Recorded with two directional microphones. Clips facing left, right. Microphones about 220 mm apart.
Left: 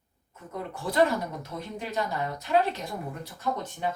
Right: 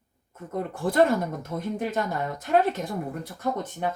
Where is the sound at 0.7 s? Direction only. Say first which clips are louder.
Right 3 dB; 50° right (ahead or behind).